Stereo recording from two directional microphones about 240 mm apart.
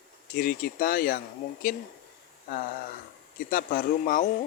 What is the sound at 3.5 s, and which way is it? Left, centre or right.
Speech, left.